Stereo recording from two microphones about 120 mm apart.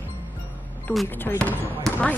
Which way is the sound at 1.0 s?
15° left (ahead or behind).